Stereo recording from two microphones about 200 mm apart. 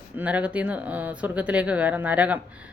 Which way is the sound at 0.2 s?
5° right (ahead or behind).